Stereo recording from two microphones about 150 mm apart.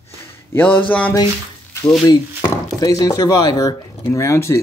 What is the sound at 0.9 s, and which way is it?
Speech, 10° left (ahead or behind).